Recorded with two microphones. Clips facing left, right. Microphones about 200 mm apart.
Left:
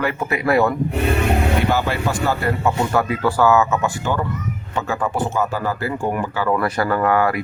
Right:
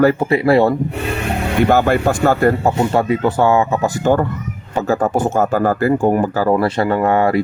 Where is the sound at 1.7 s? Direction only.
50° right (ahead or behind).